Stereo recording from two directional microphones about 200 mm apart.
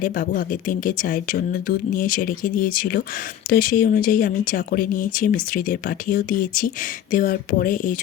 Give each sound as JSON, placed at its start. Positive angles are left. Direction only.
{"t": 0.0, "sound": "speech", "side_deg": 45}